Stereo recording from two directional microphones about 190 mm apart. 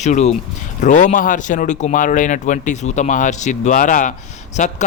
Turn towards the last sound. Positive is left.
turn(degrees=35)  # may be behind; listen again after turning